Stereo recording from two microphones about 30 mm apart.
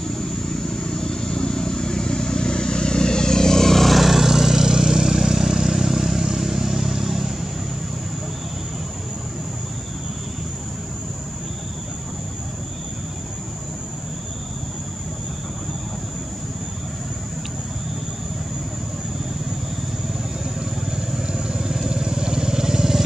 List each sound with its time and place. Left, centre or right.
0.2 s vehicle: centre
3.9 s vehicle: centre
20.9 s vehicle: right